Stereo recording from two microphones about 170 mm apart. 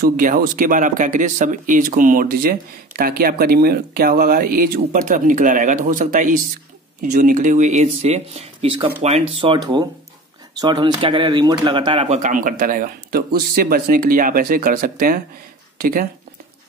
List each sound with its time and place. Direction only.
0.0 s a man's voice: 55° right (ahead or behind); by 12.2 s 30° right (ahead or behind)
12.2 s speech: 50° right (ahead or behind)